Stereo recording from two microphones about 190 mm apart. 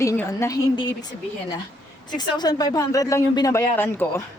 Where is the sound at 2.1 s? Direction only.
20° left (ahead or behind).